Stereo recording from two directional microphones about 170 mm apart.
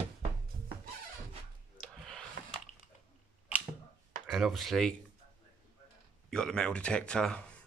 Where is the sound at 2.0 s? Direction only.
5° left (ahead or behind).